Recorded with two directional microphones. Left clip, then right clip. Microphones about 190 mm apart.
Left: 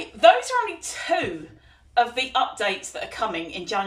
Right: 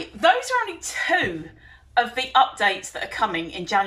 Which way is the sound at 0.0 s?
15° left (ahead or behind).